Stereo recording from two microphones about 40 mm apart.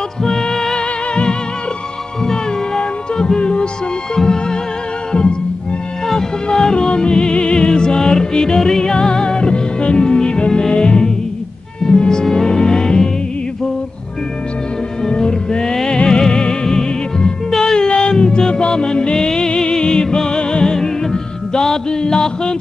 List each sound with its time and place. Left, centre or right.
0.2 s music: centre
2.2 s music: centre
15.0 s music: left